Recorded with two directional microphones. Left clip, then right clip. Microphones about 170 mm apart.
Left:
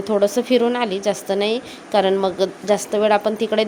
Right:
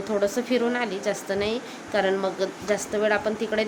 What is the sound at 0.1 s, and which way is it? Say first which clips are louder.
A woman's voice: left 7 dB; 25° left (ahead or behind).